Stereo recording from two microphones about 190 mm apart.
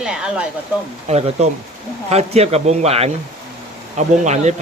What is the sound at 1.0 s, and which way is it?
Speech, 35° right (ahead or behind).